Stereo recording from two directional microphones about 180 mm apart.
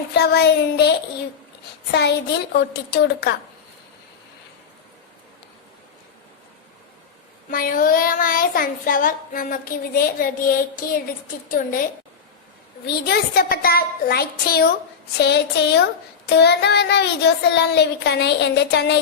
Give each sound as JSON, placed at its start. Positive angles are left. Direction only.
{"t": 0.1, "sound": "speech", "side_deg": 65}
{"t": 1.9, "sound": "child singing", "side_deg": 65}
{"t": 7.5, "sound": "child singing", "side_deg": 50}
{"t": 12.8, "sound": "speech", "side_deg": 60}
{"t": 15.2, "sound": "child singing", "side_deg": 65}